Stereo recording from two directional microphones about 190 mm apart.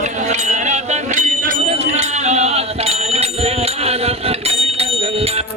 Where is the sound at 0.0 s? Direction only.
40° right (ahead or behind).